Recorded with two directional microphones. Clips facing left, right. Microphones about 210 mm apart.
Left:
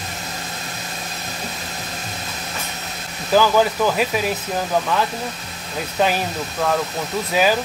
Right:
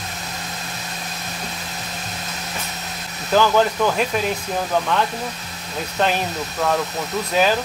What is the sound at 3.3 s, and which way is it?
Speech, 5° left (ahead or behind).